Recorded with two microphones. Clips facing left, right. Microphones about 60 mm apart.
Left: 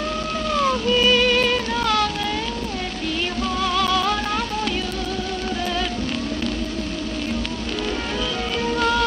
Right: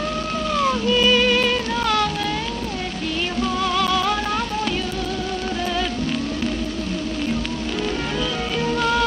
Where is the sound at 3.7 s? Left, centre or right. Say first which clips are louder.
Left 1 dB; centre.